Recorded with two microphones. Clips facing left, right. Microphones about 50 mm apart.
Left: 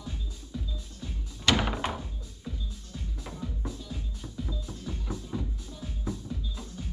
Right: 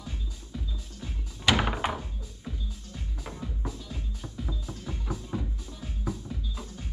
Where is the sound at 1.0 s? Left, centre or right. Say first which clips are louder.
Right 1 dB; centre.